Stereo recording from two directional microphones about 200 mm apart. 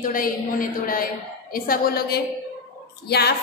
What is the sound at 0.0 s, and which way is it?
A woman's voice, 45° left (ahead or behind).